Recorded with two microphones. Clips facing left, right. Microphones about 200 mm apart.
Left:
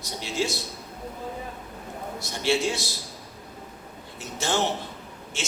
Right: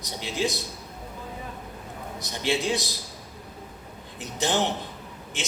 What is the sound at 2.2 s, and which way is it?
Speech, 20° right (ahead or behind).